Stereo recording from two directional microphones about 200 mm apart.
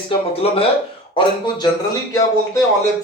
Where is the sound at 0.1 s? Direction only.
30° left (ahead or behind).